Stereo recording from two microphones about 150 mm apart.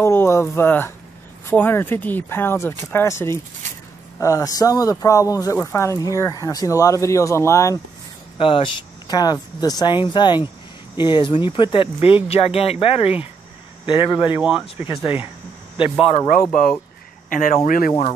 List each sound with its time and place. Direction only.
0.0 s speech: 15° left (ahead or behind)
8.4 s speech: 35° left (ahead or behind)
14.3 s speech: 10° right (ahead or behind)
15.8 s speech: 40° left (ahead or behind)
17.3 s speech: 65° left (ahead or behind)